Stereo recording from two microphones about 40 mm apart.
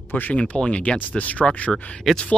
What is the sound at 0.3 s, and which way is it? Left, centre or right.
Speech, left.